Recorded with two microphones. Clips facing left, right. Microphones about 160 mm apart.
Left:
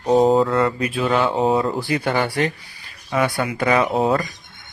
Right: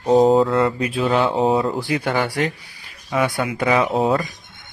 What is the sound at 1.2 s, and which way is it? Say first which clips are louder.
Speech: right 1 dB; centre (ahead or behind).